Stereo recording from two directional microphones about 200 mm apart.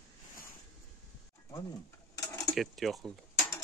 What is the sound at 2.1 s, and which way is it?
Cutlery, 15° left (ahead or behind).